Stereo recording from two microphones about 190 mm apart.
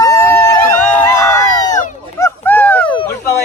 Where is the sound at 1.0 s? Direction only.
15° left (ahead or behind).